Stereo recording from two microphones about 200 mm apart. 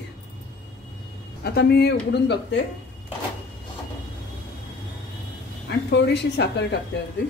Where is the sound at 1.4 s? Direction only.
55° left (ahead or behind).